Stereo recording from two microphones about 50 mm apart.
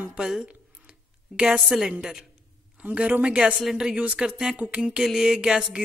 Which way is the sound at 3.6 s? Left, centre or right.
Centre.